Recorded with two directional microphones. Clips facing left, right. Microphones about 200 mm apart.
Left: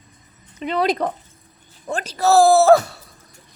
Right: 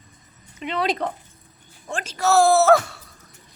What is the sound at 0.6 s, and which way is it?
Speech, 40° left (ahead or behind).